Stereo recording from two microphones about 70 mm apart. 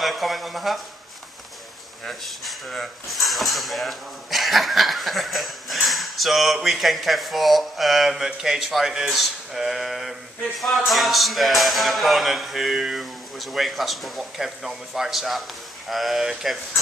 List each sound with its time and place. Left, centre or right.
0.0 s speech: centre
2.0 s speech: centre